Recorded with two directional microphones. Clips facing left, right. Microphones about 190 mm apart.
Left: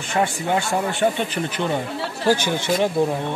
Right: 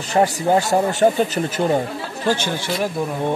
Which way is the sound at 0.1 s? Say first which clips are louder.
Right 5 dB; 35° right (ahead or behind).